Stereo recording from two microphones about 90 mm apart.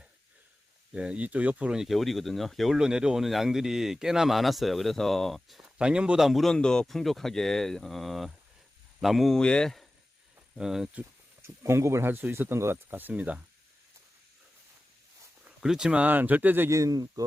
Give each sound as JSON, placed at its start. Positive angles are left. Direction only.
{"t": 0.9, "sound": "speech", "side_deg": -10}
{"t": 5.6, "sound": "speech", "side_deg": -10}
{"t": 10.5, "sound": "speech", "side_deg": -5}
{"t": 11.4, "sound": "speech", "side_deg": -30}
{"t": 15.4, "sound": "speech", "side_deg": -5}
{"t": 16.6, "sound": "speech", "side_deg": -35}